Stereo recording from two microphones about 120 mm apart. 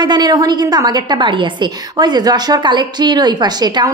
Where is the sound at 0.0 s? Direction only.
35° right (ahead or behind).